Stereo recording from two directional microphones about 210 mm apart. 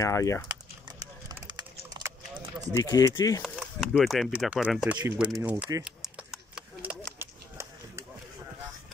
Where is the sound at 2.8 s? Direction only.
15° left (ahead or behind).